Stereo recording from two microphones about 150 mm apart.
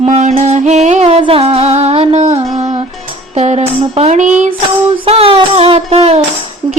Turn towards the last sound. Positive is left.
turn(degrees=-45)  # may be behind; listen again after turning